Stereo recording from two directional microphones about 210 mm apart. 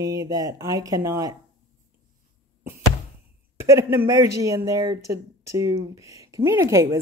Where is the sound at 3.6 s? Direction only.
15° right (ahead or behind).